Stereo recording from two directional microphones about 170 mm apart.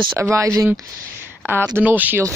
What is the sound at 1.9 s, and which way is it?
Speech, 10° right (ahead or behind).